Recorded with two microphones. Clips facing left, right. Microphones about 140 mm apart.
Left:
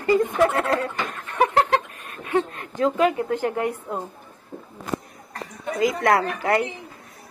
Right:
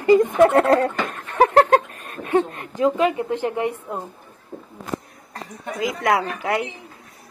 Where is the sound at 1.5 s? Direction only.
45° right (ahead or behind).